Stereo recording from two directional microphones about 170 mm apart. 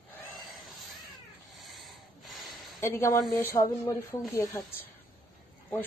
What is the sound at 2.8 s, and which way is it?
Speech, 15° left (ahead or behind).